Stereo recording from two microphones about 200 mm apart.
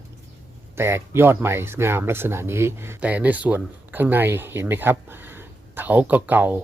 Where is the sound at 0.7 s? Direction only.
10° right (ahead or behind).